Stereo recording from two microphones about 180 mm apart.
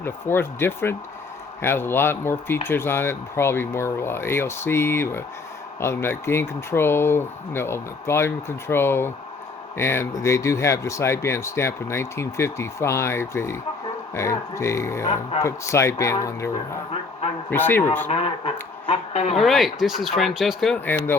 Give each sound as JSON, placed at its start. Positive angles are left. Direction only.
{"t": 0.0, "sound": "speech", "side_deg": 15}
{"t": 17.5, "sound": "speech", "side_deg": 10}
{"t": 18.1, "sound": "speech", "side_deg": 35}
{"t": 19.4, "sound": "speech", "side_deg": 0}